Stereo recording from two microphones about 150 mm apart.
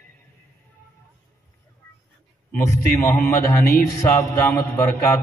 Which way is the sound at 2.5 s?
15° left (ahead or behind).